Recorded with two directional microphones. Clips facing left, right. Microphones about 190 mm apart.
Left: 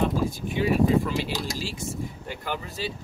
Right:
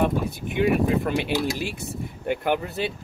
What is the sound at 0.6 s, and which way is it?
Speech, 60° right (ahead or behind).